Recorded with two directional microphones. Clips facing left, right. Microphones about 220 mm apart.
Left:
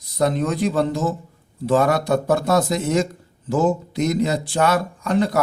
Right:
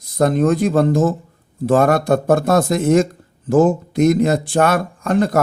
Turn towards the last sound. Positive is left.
turn(degrees=-50)  # may be behind; listen again after turning